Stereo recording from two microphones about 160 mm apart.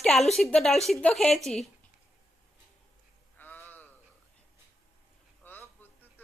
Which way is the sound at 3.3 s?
10° left (ahead or behind).